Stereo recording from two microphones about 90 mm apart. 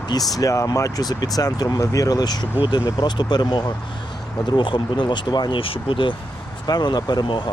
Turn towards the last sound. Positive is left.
turn(degrees=55)  # may be behind; listen again after turning